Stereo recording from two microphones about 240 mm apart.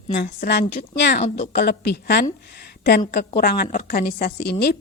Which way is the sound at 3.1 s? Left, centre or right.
Left.